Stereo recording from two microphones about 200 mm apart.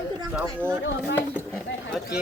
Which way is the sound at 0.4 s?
10° right (ahead or behind).